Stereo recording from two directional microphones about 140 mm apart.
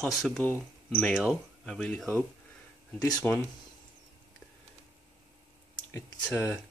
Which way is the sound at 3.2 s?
15° left (ahead or behind).